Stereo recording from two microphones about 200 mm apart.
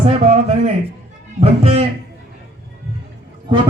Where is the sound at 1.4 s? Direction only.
30° right (ahead or behind).